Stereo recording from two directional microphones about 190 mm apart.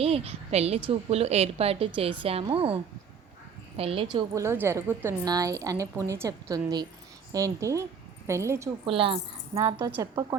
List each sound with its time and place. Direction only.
0.0 s a woman's voice: 30° right (ahead or behind)
4.4 s a woman's voice: 15° right (ahead or behind)
8.9 s a woman's voice: 30° right (ahead or behind)